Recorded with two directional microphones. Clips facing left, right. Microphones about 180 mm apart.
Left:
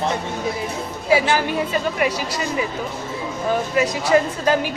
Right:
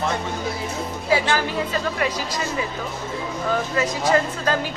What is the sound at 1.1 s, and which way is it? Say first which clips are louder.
Speech: left 3 dB; 15° left (ahead or behind).